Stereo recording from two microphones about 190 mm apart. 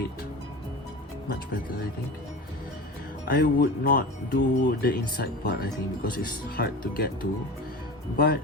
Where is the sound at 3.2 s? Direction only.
50° left (ahead or behind).